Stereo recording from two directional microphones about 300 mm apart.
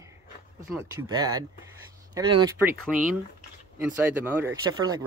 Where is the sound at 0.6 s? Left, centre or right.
Centre.